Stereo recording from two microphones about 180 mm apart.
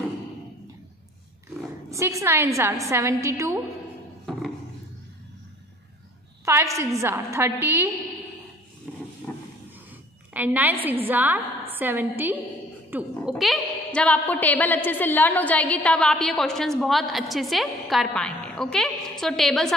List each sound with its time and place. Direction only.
1.9 s a woman's voice: 15° right (ahead or behind)
6.4 s a woman's voice: 15° right (ahead or behind)
8.9 s vehicle: centre (ahead or behind)
9.3 s vehicle: 10° left (ahead or behind)
10.3 s a woman's voice: 10° right (ahead or behind)
13.4 s a woman's voice: 5° left (ahead or behind)